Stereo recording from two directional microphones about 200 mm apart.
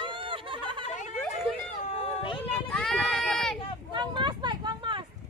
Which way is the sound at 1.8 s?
25° left (ahead or behind).